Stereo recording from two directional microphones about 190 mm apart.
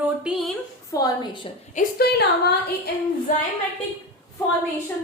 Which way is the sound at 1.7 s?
55° left (ahead or behind).